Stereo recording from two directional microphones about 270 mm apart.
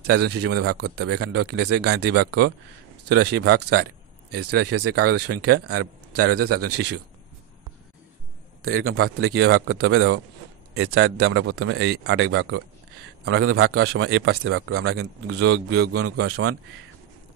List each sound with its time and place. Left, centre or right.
0.2 s a man's voice: right
0.5 s a man's voice: right
1.6 s a man's voice: right
4.3 s a man's voice: right
8.6 s a man's voice: right
16.3 s a man's voice: right